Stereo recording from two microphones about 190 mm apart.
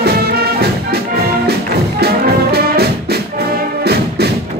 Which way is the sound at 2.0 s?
55° right (ahead or behind).